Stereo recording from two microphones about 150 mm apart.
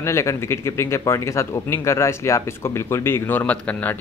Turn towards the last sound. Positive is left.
turn(degrees=10)  # may be behind; listen again after turning